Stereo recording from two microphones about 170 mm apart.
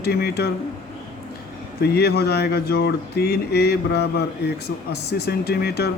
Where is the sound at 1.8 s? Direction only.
70° left (ahead or behind).